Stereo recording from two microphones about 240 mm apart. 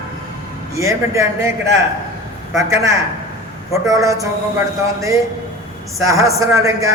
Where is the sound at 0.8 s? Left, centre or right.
Centre.